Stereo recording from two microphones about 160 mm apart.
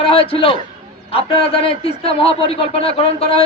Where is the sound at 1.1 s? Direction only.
35° left (ahead or behind).